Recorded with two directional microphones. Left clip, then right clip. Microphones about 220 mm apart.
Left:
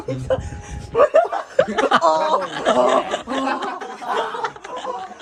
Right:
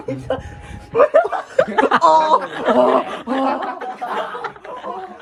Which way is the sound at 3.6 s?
15° left (ahead or behind).